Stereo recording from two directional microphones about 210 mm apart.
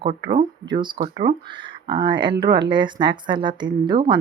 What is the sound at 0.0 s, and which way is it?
Speech, 25° right (ahead or behind).